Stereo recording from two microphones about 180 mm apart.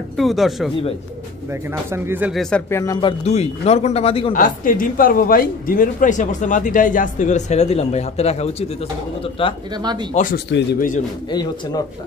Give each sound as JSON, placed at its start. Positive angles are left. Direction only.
{"t": 0.2, "sound": "speech", "side_deg": 0}
{"t": 1.5, "sound": "speech", "side_deg": -15}
{"t": 2.5, "sound": "speech", "side_deg": 15}
{"t": 3.3, "sound": "speech", "side_deg": 35}
{"t": 4.3, "sound": "a man's voice", "side_deg": 50}
{"t": 9.8, "sound": "speech", "side_deg": -25}
{"t": 10.1, "sound": "a man's voice", "side_deg": 50}
{"t": 11.2, "sound": "speech", "side_deg": 20}